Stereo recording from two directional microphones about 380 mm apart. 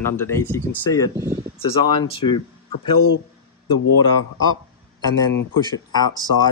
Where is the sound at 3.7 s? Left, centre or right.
Left.